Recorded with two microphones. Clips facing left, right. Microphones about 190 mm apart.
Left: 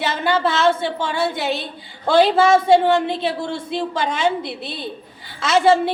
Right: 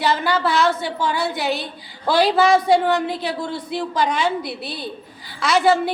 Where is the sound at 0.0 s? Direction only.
25° left (ahead or behind).